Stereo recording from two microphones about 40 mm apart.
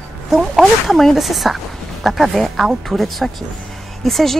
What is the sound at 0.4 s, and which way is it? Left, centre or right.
Speech, centre.